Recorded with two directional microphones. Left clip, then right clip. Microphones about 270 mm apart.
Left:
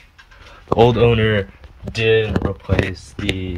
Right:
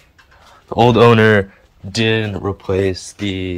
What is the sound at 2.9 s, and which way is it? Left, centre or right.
Speech, centre.